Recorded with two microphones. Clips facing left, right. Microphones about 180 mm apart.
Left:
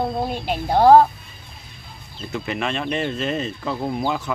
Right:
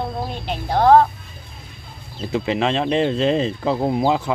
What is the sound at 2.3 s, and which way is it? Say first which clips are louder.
Speech: right 5 dB; 25° right (ahead or behind).